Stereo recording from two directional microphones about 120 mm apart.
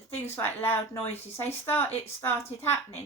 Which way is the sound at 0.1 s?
20° left (ahead or behind).